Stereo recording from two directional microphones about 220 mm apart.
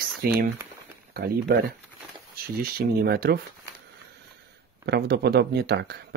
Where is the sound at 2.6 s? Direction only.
45° right (ahead or behind).